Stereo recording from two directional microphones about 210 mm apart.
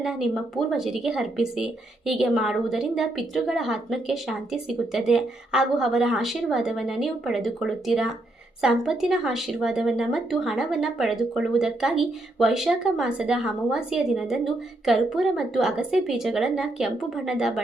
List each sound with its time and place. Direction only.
0.0 s speech: centre (ahead or behind)